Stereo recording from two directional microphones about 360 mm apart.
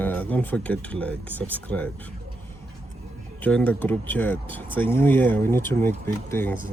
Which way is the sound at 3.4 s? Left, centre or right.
Centre.